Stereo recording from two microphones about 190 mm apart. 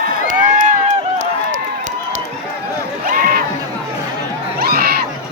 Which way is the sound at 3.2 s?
50° right (ahead or behind).